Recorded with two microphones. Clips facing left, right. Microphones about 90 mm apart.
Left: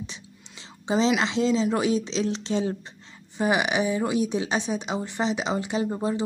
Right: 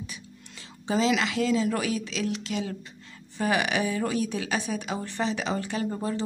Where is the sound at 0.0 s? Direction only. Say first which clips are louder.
Left 2 dB; 25° left (ahead or behind).